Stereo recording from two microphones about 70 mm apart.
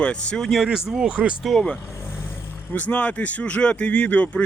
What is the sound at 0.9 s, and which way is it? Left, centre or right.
Speech, centre.